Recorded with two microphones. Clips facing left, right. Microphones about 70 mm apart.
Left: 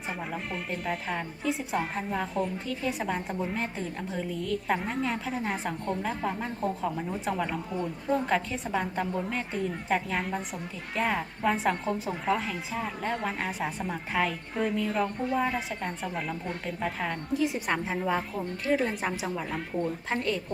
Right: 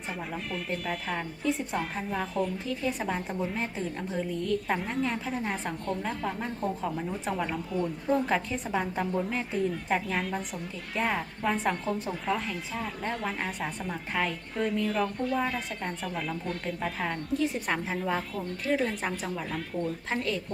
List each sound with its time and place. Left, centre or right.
0.1 s a woman's voice: centre
15.0 s speech: centre
15.5 s a woman's voice: centre